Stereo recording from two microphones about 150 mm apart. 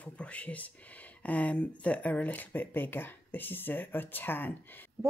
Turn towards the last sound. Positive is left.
turn(degrees=10)  # may be behind; listen again after turning